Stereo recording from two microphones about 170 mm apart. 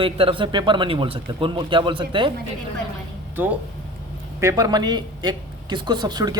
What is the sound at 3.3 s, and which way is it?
Speech, 10° right (ahead or behind).